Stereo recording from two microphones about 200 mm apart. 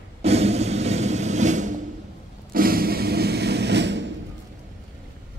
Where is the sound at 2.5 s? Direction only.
50° right (ahead or behind).